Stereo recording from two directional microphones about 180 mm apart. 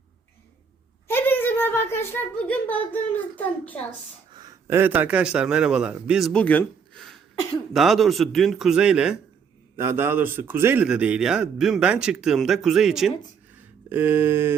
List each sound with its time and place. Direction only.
1.0 s a woman's voice: 10° left (ahead or behind)
4.4 s a man's voice: 15° right (ahead or behind)
13.9 s a sound: 10° right (ahead or behind)